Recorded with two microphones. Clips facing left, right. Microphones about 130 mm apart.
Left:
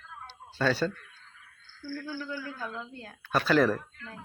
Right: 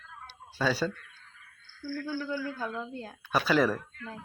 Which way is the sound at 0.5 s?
5° right (ahead or behind).